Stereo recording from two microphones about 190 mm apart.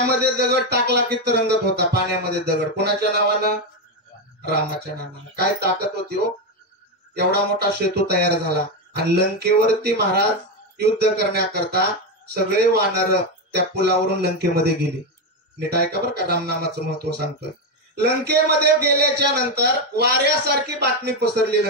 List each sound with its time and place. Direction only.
0.0 s a man's voice: 60° right (ahead or behind)
5.3 s a man's voice: 55° right (ahead or behind)
7.2 s a man's voice: 60° right (ahead or behind)